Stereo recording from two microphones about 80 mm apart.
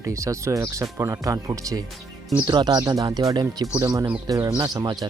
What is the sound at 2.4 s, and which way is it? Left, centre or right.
Speech, right.